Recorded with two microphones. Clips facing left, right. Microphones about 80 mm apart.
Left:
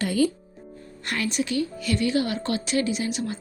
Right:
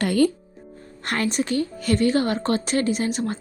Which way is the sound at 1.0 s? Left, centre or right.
Right.